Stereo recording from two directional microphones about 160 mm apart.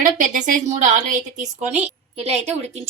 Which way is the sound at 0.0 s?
55° right (ahead or behind).